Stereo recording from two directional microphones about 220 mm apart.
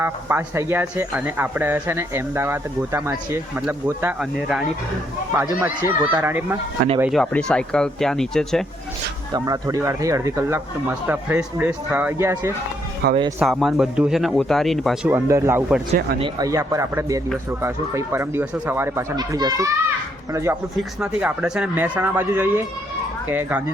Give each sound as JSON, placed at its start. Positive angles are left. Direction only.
{"t": 0.0, "sound": "speech", "side_deg": -10}
{"t": 7.0, "sound": "speech", "side_deg": 0}
{"t": 9.3, "sound": "speech", "side_deg": -15}
{"t": 13.0, "sound": "speech", "side_deg": -45}
{"t": 13.4, "sound": "speech", "side_deg": 0}
{"t": 15.1, "sound": "speech", "side_deg": -10}